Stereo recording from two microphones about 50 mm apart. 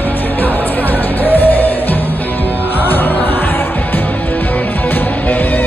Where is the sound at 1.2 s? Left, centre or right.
Left.